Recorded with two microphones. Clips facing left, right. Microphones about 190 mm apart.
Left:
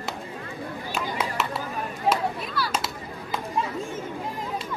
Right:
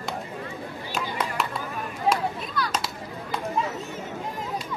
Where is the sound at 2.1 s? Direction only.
5° left (ahead or behind).